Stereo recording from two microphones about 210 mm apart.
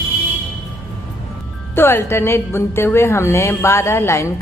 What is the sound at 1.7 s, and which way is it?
A woman's voice, 10° left (ahead or behind).